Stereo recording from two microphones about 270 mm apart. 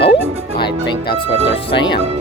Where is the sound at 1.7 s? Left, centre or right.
Centre.